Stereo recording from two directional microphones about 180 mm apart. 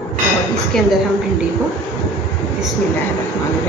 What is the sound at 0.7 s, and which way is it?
Speech, 5° left (ahead or behind).